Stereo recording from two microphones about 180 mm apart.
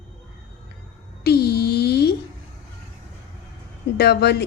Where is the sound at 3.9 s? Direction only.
65° left (ahead or behind).